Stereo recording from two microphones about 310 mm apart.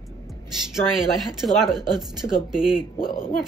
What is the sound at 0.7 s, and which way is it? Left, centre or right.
Speech, centre.